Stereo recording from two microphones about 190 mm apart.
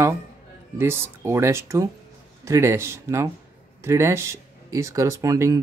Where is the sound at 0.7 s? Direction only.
15° right (ahead or behind).